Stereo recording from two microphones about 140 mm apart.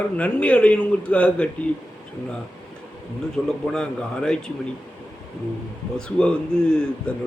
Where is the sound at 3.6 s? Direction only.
5° left (ahead or behind).